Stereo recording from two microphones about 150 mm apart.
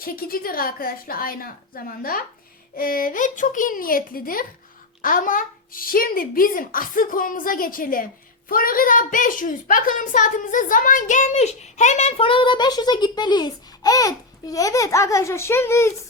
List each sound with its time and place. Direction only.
0.0 s a woman's voice: 75° left (ahead or behind); by 15.9 s 15° left (ahead or behind)